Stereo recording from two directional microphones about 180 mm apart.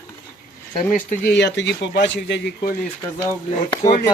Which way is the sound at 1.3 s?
80° left.